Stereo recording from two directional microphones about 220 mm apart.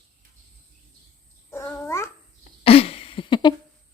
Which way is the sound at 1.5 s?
10° left (ahead or behind).